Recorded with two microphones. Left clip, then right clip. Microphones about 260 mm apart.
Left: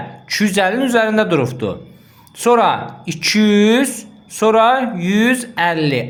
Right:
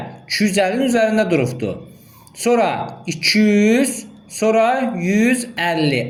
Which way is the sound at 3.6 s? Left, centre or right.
Left.